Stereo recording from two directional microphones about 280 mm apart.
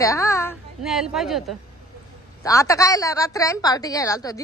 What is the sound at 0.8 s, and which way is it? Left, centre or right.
Speech, centre.